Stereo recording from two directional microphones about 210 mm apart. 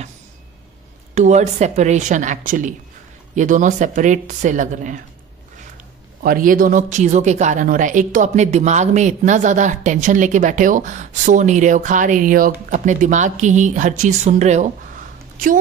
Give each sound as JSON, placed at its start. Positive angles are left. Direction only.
{"t": 1.1, "sound": "speech", "side_deg": -35}
{"t": 6.2, "sound": "speech", "side_deg": -40}